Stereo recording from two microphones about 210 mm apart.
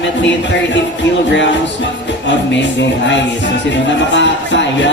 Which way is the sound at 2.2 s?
60° left (ahead or behind).